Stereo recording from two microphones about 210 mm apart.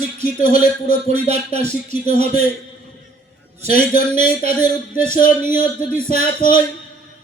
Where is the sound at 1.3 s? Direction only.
30° right (ahead or behind).